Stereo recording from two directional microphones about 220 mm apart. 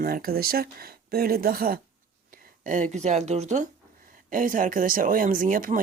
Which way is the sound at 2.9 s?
30° right (ahead or behind).